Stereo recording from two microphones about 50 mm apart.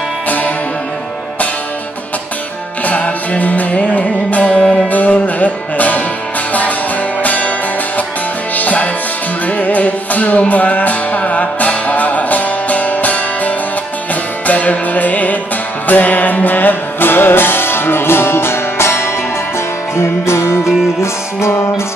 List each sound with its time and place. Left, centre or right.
2.8 s music: left
4.6 s music: centre
4.8 s music: left
7.2 s music: left
8.5 s music: left
14.5 s music: left